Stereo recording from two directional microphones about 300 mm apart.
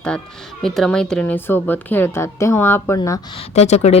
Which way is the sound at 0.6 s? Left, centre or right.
Centre.